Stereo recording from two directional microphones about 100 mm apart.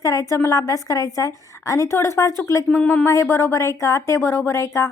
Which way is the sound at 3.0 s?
30° left (ahead or behind).